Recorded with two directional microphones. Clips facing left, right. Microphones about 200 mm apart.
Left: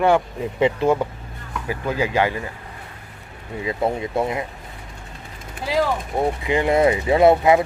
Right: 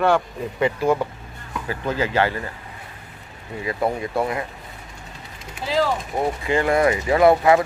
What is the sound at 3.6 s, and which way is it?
Speech, 20° left (ahead or behind).